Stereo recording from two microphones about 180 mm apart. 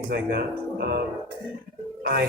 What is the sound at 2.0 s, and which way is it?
Speech, 65° right (ahead or behind).